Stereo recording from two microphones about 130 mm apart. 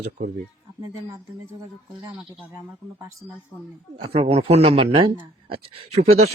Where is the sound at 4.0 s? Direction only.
50° right (ahead or behind).